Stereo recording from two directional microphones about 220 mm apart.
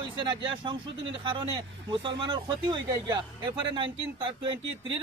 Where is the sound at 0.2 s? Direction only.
20° right (ahead or behind).